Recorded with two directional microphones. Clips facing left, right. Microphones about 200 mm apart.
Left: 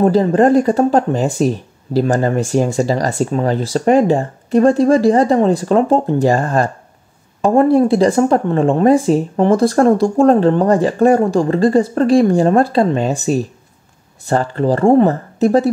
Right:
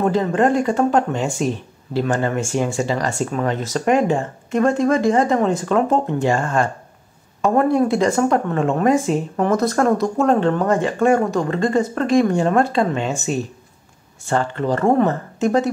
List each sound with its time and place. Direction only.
0.0 s speech: 35° left (ahead or behind)